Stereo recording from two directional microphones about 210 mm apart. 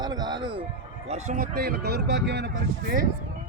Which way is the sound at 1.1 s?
35° right (ahead or behind).